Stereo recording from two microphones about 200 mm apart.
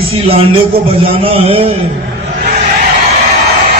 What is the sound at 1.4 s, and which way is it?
Speech, 30° right (ahead or behind).